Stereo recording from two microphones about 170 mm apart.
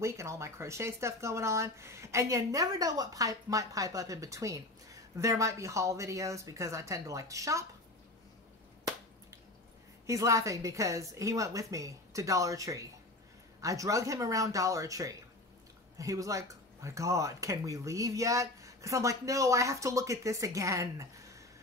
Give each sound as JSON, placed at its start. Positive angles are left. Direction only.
{"t": 0.0, "sound": "speech", "side_deg": -15}
{"t": 10.0, "sound": "speech", "side_deg": -20}